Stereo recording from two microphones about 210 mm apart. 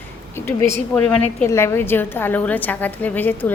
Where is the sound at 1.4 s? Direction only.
10° left (ahead or behind).